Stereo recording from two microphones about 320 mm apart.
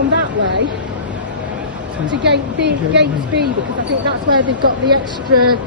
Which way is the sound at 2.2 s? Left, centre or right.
Right.